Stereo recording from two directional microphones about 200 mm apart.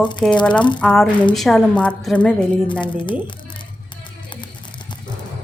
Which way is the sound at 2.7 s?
25° left (ahead or behind).